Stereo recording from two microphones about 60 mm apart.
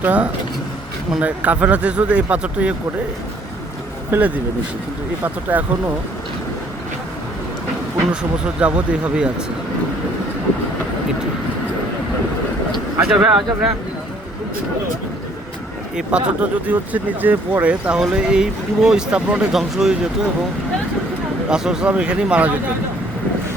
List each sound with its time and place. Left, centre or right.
0.0 s speech: right
4.1 s speech: right
8.1 s speech: centre
13.0 s speech: centre
16.0 s speech: centre
19.5 s speech: centre
21.5 s speech: centre